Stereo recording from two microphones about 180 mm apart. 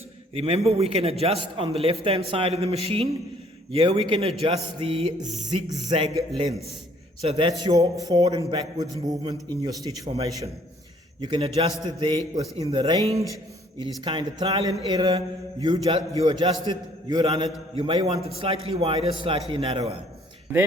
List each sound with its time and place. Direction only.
0.3 s a man's voice: 35° right (ahead or behind)